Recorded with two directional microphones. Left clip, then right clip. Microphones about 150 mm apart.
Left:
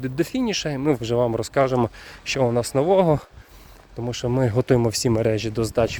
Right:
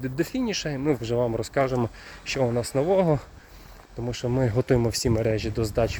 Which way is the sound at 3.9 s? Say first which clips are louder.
Left 3 dB; 45° left (ahead or behind).